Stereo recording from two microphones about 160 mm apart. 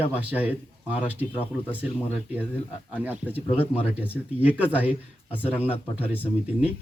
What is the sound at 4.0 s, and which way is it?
A man's voice, 10° right (ahead or behind).